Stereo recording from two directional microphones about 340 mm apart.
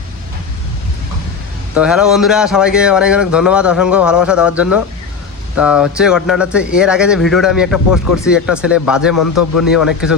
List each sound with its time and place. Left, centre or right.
1.7 s speech: centre
9.1 s a man's voice: left
9.6 s speech: centre